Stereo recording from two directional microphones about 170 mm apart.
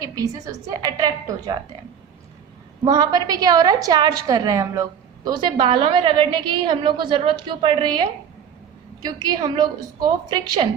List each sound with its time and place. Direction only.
0.0 s a woman's voice: 20° right (ahead or behind)
2.8 s a woman's voice: 20° right (ahead or behind)
5.5 s a woman's voice: 30° right (ahead or behind)
9.0 s a woman's voice: 25° right (ahead or behind)